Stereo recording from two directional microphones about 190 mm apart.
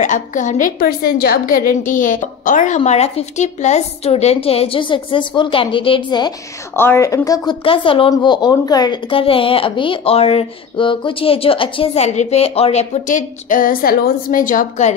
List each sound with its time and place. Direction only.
0.0 s a woman's voice: 40° left (ahead or behind); by 6.3 s 25° left (ahead or behind)
6.7 s a woman's voice: 10° left (ahead or behind); by 15.0 s 40° left (ahead or behind)